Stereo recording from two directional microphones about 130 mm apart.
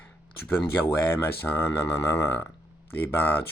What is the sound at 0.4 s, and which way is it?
Speech, 15° left (ahead or behind).